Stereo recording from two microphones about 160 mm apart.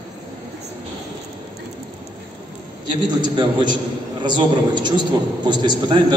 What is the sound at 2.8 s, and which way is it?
A man's voice, 30° right (ahead or behind).